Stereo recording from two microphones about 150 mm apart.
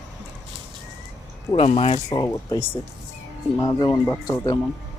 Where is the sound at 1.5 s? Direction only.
40° left (ahead or behind); by 4.6 s 25° left (ahead or behind).